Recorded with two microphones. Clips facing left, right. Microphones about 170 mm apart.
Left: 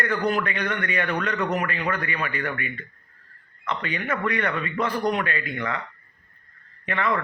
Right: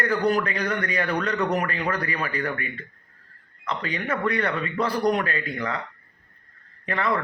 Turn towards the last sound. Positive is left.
turn(degrees=-35)  # may be behind; listen again after turning